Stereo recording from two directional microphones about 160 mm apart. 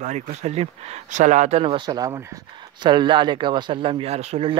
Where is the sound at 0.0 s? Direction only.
45° right (ahead or behind).